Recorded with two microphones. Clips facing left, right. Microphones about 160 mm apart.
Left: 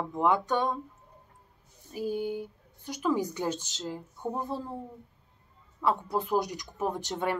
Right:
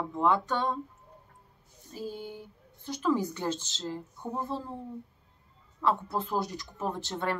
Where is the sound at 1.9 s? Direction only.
15° left (ahead or behind).